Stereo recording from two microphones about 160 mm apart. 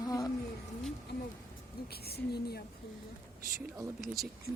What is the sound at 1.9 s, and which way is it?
Speech, 80° left.